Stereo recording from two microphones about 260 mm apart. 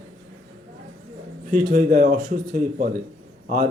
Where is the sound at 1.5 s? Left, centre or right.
Right.